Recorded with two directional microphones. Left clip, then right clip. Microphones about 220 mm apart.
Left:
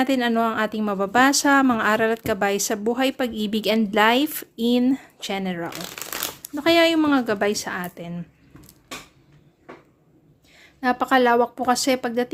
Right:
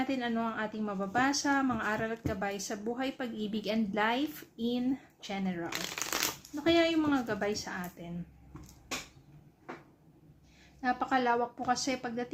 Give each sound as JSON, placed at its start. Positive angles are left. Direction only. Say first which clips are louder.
{"t": 0.0, "sound": "a woman's voice", "louder": "left 13 dB", "side_deg": 50}
{"t": 6.0, "sound": "shuffling cards", "louder": "left 2 dB", "side_deg": 10}
{"t": 6.4, "sound": "a woman's voice", "louder": "left 11 dB", "side_deg": 50}
{"t": 10.8, "sound": "a woman's voice", "louder": "left 11 dB", "side_deg": 50}